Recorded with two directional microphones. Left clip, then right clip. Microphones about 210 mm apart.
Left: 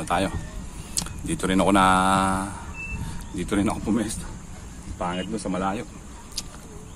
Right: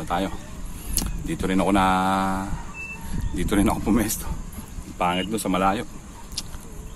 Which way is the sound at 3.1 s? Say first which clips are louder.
Right 3 dB; 10° right (ahead or behind).